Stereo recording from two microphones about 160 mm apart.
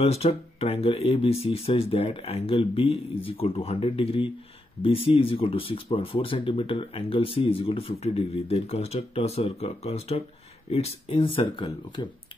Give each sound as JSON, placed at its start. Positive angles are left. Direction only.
{"t": 0.0, "sound": "speech", "side_deg": 40}